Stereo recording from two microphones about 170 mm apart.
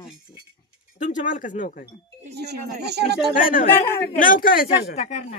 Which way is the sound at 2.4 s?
75° right (ahead or behind).